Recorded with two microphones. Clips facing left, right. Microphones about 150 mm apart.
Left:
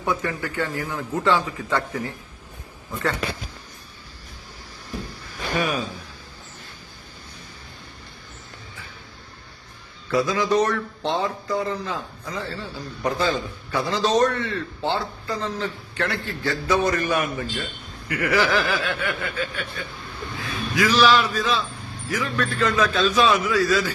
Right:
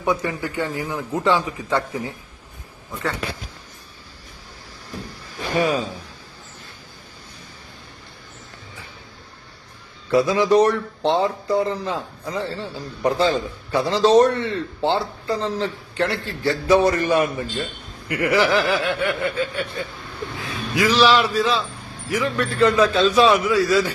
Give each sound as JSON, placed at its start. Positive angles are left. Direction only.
{"t": 0.0, "sound": "a man's voice", "side_deg": -15}
{"t": 5.5, "sound": "a man's voice", "side_deg": -25}
{"t": 10.1, "sound": "a man's voice", "side_deg": -25}